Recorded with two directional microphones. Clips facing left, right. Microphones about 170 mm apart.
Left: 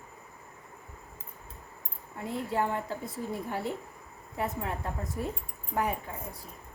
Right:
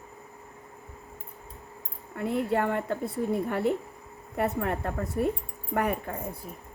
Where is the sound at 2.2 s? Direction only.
60° right (ahead or behind).